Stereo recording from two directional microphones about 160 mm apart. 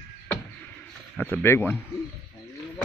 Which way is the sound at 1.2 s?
15° left (ahead or behind).